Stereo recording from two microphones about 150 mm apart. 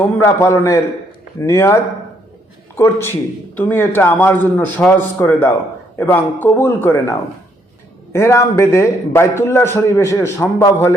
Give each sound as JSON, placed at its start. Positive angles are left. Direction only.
{"t": 0.0, "sound": "a man's voice", "side_deg": 20}
{"t": 8.1, "sound": "a man's voice", "side_deg": 20}